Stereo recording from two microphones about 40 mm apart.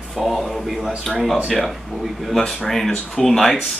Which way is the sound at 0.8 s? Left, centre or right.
Centre.